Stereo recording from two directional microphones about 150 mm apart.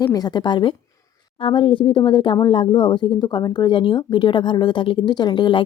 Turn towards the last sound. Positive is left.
turn(degrees=30)  # may be behind; listen again after turning